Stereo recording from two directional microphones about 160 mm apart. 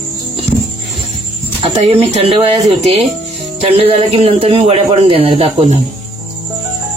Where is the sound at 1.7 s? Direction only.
40° right (ahead or behind).